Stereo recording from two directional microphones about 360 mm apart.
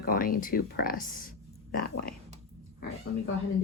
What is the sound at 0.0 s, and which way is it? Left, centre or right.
Speech, left.